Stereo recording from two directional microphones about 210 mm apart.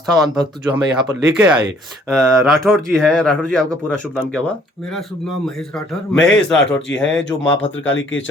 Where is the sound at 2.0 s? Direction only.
Centre (ahead or behind).